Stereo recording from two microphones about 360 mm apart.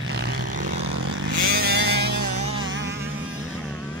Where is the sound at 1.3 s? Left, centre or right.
Right.